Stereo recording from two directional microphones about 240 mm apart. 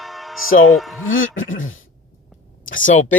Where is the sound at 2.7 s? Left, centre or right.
Left.